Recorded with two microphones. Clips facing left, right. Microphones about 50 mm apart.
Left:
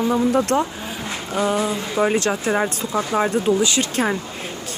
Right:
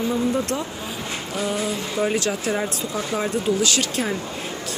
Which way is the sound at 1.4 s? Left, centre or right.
Left.